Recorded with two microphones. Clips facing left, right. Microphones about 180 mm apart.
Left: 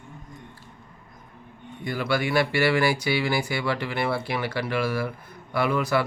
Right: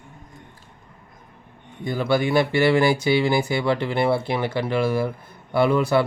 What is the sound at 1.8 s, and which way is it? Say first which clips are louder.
A man's voice: right 4 dB; 25° right (ahead or behind).